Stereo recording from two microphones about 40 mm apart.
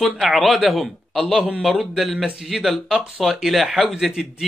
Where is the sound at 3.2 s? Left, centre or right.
Centre.